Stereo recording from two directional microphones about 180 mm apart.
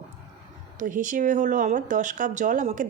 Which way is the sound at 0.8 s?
45° right (ahead or behind).